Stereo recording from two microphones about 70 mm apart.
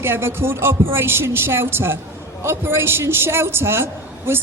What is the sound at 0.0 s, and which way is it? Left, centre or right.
A woman's voice, right.